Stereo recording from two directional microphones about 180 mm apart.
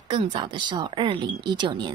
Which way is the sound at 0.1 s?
30° right (ahead or behind).